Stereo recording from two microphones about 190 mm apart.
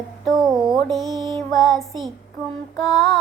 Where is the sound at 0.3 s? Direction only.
Centre (ahead or behind).